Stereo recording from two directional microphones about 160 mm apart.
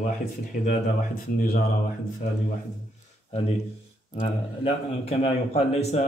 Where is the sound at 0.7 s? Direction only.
60° left (ahead or behind).